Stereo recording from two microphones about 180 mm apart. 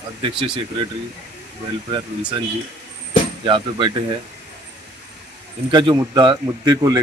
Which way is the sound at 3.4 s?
25° right (ahead or behind).